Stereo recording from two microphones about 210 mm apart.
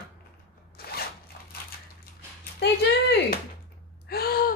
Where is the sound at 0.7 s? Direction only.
45° left (ahead or behind).